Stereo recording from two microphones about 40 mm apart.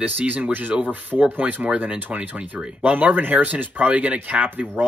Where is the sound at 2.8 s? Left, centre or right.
Right.